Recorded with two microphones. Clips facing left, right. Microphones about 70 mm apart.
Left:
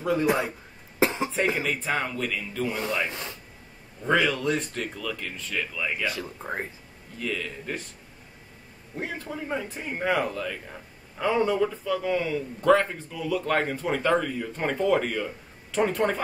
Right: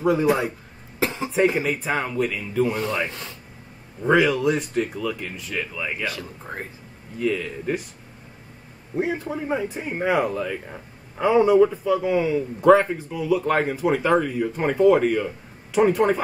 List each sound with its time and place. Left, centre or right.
0.0 s a man's voice: centre
0.9 s cough: left
1.3 s speech: centre
4.0 s speech: centre
7.2 s speech: centre
8.9 s speech: centre